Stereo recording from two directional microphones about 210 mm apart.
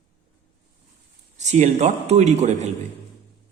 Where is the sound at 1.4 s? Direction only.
35° right (ahead or behind).